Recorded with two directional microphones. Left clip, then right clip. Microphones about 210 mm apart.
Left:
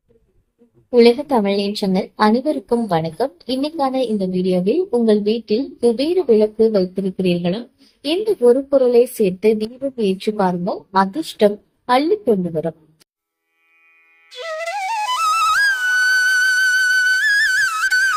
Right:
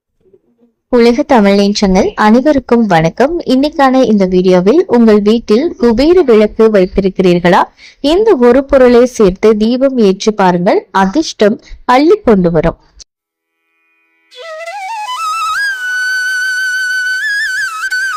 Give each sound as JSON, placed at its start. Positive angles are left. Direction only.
{"t": 0.9, "sound": "speech", "side_deg": -40}
{"t": 14.3, "sound": "flute", "side_deg": 0}